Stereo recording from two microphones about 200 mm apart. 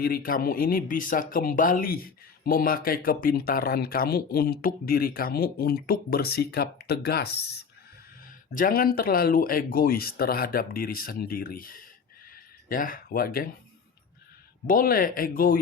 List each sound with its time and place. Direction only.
0.0 s speech: 45° left (ahead or behind)
8.5 s speech: 45° left (ahead or behind)
14.7 s speech: 45° left (ahead or behind)